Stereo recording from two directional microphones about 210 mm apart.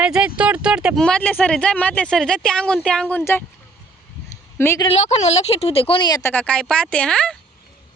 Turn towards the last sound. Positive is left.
turn(degrees=5)  # may be behind; listen again after turning